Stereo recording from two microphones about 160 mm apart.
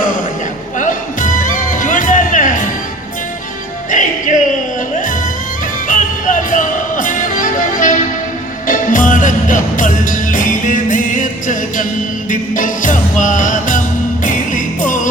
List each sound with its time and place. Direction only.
0.8 s music: 55° left (ahead or behind)
3.9 s music: 55° left (ahead or behind)
5.9 s music: 55° left (ahead or behind)